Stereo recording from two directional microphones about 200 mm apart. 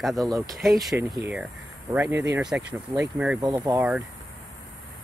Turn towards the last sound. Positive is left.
turn(degrees=-10)  # may be behind; listen again after turning